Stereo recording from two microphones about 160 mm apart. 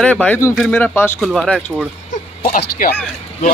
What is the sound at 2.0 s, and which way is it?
Speech, 55° left (ahead or behind).